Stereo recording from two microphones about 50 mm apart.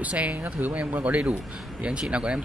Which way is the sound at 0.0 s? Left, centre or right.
Right.